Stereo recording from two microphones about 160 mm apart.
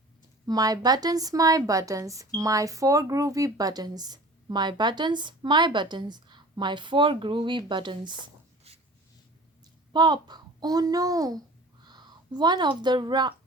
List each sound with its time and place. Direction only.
0.4 s speech: 25° right (ahead or behind)
9.9 s a woman's voice: 25° right (ahead or behind)